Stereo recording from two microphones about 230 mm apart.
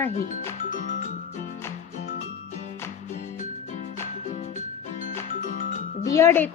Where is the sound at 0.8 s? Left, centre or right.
Left.